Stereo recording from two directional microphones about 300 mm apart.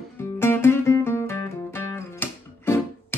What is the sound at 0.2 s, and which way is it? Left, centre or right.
Music, centre.